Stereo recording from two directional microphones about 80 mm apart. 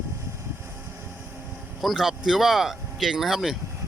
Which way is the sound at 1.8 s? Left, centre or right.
Centre.